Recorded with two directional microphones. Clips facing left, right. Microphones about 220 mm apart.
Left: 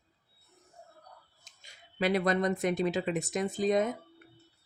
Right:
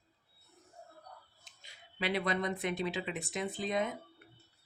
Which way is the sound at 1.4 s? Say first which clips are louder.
Left 1 dB; 45° left (ahead or behind).